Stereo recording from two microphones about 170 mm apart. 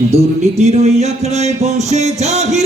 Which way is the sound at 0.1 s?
40° right (ahead or behind).